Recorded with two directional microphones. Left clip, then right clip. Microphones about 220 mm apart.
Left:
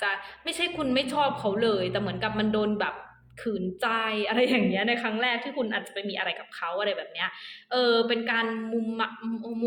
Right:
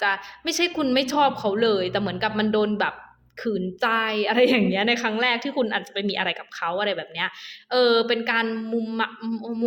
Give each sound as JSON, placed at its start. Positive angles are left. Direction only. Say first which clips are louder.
{"t": 0.0, "sound": "a woman's voice", "louder": "right 5 dB", "side_deg": -45}